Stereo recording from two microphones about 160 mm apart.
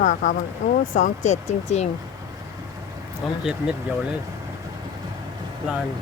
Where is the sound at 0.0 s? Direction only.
55° left (ahead or behind).